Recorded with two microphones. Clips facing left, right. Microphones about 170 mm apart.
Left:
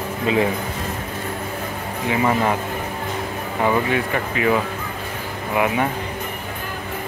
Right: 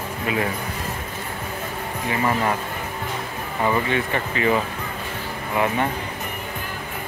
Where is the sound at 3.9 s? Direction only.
5° left (ahead or behind).